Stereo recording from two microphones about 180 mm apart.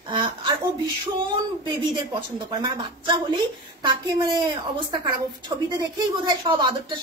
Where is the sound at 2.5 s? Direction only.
25° right (ahead or behind).